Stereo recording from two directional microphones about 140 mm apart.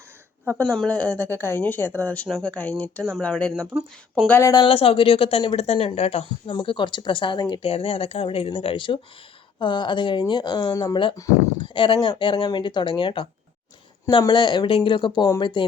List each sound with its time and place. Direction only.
0.6 s speech: 5° left (ahead or behind)
3.7 s speech: 25° right (ahead or behind)
4.3 s a woman's voice: 20° left (ahead or behind)
4.5 s a woman's voice: 40° left (ahead or behind)
6.5 s a woman's voice: 35° left (ahead or behind)